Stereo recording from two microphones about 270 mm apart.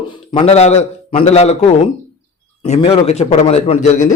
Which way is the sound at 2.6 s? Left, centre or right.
Left.